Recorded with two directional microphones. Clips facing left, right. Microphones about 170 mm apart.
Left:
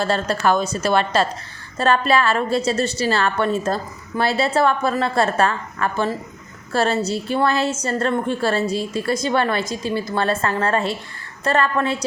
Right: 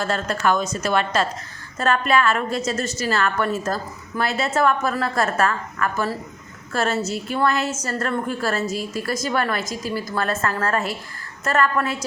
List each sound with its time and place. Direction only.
0.0 s a woman's voice: 30° left (ahead or behind)